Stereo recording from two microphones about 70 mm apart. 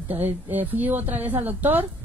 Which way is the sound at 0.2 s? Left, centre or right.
Right.